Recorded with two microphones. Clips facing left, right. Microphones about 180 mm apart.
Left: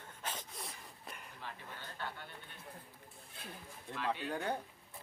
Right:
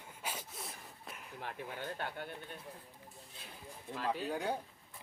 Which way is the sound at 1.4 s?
55° right (ahead or behind).